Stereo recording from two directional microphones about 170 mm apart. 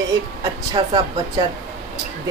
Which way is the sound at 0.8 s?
30° right (ahead or behind).